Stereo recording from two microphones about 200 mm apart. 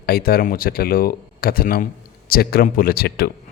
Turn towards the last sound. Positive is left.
turn(degrees=50)  # may be behind; listen again after turning